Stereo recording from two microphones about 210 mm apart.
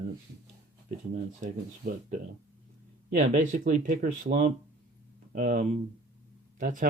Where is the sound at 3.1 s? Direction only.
40° right (ahead or behind).